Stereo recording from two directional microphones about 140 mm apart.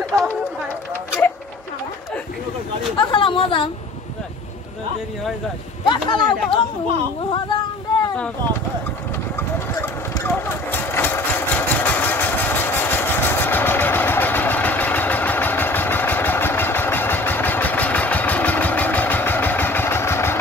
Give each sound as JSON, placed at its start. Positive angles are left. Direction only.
{"t": 3.0, "sound": "chatter", "side_deg": 35}
{"t": 5.9, "sound": "speech", "side_deg": 35}
{"t": 9.8, "sound": "engine", "side_deg": 20}